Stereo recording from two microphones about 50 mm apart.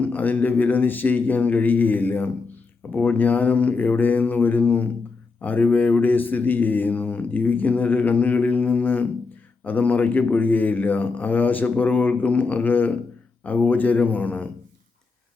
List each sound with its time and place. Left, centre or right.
0.0 s speech: left